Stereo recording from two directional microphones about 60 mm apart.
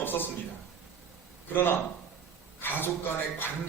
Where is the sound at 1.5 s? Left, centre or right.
Left.